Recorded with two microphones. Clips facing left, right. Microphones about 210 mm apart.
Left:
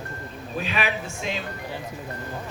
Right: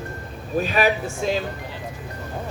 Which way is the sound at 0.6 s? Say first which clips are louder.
Right 7 dB; 40° right (ahead or behind).